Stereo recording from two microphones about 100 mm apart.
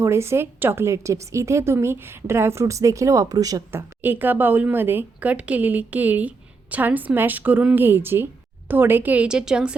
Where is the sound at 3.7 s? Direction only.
20° right (ahead or behind).